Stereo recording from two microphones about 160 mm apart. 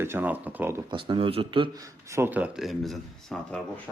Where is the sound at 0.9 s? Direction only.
30° right (ahead or behind).